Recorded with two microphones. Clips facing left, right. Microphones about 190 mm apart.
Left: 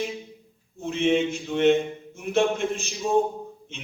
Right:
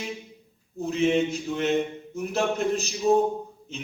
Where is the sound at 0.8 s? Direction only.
35° right (ahead or behind).